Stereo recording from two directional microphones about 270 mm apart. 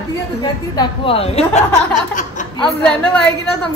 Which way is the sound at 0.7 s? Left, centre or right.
Centre.